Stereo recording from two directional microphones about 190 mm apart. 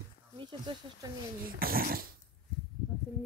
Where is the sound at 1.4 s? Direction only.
50° right (ahead or behind).